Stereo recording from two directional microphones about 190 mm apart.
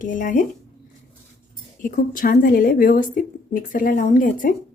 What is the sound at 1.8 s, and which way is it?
A woman's voice, 45° left (ahead or behind).